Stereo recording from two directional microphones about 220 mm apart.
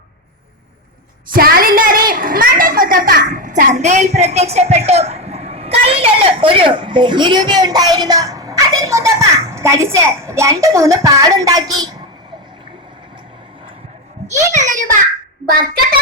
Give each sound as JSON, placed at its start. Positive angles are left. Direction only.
{"t": 1.3, "sound": "a woman's voice", "side_deg": -40}
{"t": 14.3, "sound": "a sound", "side_deg": -35}
{"t": 15.4, "sound": "a woman's voice", "side_deg": -40}